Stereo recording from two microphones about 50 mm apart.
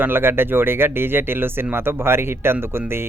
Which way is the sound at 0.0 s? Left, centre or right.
Right.